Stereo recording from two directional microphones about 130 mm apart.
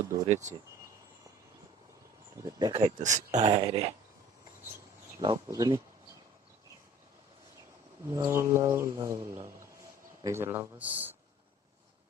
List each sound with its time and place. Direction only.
0.3 s speech: 65° right (ahead or behind)
2.4 s speech: 30° right (ahead or behind)
3.0 s speech: 65° right (ahead or behind)
3.4 s a sound: 40° right (ahead or behind)
5.2 s speech: 35° right (ahead or behind)
8.1 s a man's voice: 20° right (ahead or behind)